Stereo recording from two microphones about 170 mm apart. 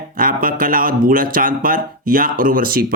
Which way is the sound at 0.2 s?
55° right (ahead or behind).